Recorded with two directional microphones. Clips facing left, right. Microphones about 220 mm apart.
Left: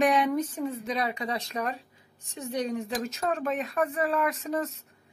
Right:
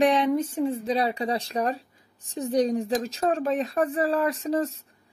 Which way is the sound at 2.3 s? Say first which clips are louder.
Right 7 dB; 35° right (ahead or behind).